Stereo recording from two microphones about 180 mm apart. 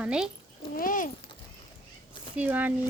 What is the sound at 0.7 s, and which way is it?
Speech, 50° left (ahead or behind).